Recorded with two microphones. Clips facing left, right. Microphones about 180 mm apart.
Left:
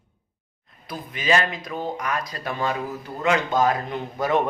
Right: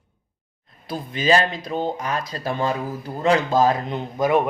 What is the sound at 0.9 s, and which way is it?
Speech, 30° right (ahead or behind).